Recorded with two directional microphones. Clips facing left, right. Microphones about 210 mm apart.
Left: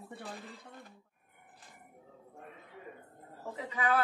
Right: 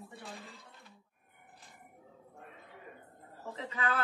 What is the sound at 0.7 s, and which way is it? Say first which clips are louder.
Cough: left 7 dB; 50° left (ahead or behind).